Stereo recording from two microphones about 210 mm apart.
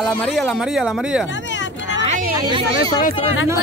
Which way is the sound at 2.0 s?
25° right (ahead or behind).